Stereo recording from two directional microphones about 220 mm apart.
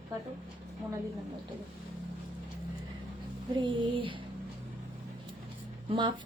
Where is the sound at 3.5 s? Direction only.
20° right (ahead or behind).